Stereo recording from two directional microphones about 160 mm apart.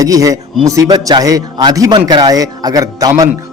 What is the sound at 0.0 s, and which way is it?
A man's voice, 20° right (ahead or behind).